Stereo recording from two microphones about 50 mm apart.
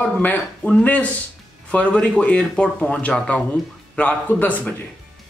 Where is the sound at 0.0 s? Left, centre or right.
Left.